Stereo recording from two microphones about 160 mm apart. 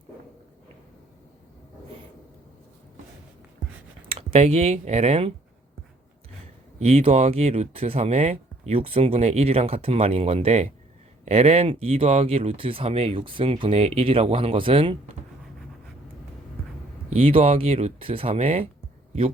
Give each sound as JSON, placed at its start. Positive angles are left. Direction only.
{"t": 4.1, "sound": "speech", "side_deg": -40}
{"t": 6.7, "sound": "speech", "side_deg": -40}
{"t": 17.2, "sound": "speech", "side_deg": -35}